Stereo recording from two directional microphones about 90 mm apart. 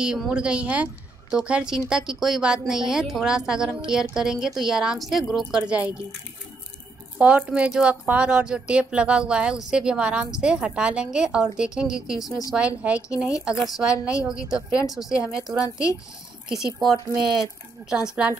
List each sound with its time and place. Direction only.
0.3 s a woman's voice: 10° right (ahead or behind)
5.6 s a woman's voice: 15° right (ahead or behind)
7.2 s a woman's voice: 15° right (ahead or behind)
12.3 s speech: 40° left (ahead or behind)
12.5 s a woman's voice: 15° right (ahead or behind)
13.5 s a woman's voice: centre (ahead or behind)
15.6 s speech: 40° left (ahead or behind)
16.4 s a woman's voice: 5° right (ahead or behind)